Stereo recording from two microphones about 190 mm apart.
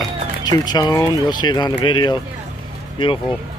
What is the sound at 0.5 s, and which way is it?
Speech, 20° left (ahead or behind).